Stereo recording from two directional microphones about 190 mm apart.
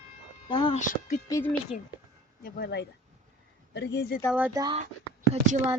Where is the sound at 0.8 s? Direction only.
40° left (ahead or behind).